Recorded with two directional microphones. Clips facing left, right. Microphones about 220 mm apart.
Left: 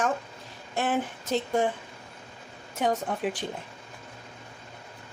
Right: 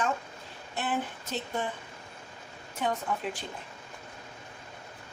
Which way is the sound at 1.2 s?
90° left.